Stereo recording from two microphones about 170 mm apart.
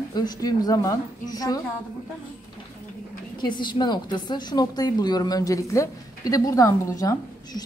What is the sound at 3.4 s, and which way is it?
A woman's voice, 25° left (ahead or behind).